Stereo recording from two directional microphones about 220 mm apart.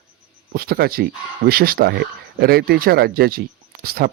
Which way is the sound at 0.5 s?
45° right (ahead or behind).